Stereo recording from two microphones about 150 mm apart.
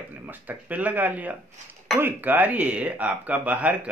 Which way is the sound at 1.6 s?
55° right (ahead or behind).